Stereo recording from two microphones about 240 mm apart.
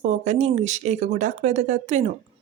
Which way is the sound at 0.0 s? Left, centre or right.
Right.